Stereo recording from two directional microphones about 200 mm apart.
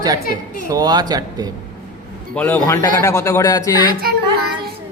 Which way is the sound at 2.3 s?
10° left (ahead or behind).